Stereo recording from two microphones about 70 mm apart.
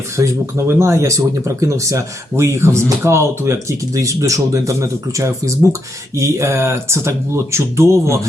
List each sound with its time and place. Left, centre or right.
0.2 s speech: right